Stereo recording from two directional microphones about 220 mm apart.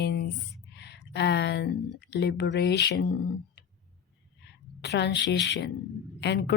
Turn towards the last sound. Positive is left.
turn(degrees=50)  # may be behind; listen again after turning